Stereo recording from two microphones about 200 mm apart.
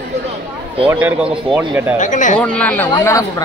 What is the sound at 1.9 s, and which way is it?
Speech, 40° left (ahead or behind).